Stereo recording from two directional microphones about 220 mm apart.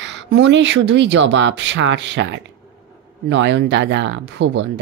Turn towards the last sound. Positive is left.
turn(degrees=-55)  # may be behind; listen again after turning